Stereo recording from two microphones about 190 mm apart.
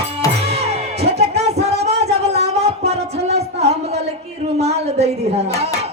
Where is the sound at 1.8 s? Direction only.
35° right (ahead or behind).